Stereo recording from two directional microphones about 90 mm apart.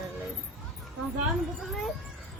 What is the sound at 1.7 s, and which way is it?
Speech, centre (ahead or behind).